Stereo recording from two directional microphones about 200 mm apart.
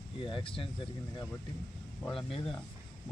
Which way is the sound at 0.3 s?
25° left (ahead or behind).